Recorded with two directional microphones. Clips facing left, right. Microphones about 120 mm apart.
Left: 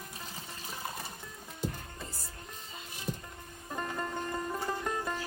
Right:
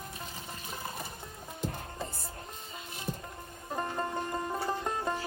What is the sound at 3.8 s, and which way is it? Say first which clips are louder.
Music: right 2 dB; 30° right (ahead or behind).